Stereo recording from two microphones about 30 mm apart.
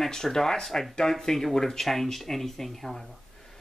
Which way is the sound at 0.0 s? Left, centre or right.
Centre.